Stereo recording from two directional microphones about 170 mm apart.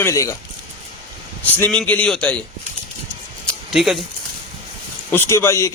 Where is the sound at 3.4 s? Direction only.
5° left (ahead or behind).